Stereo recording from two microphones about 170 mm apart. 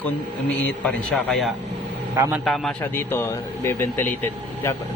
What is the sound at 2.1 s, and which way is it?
Speech, 20° right (ahead or behind).